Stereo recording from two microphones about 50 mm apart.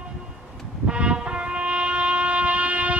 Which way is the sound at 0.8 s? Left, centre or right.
Right.